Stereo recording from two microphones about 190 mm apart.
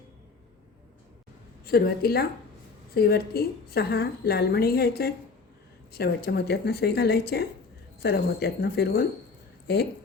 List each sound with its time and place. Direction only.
1.6 s a woman's voice: 55° left (ahead or behind)